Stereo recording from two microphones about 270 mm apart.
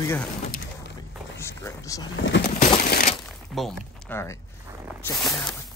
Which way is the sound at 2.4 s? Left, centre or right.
Left.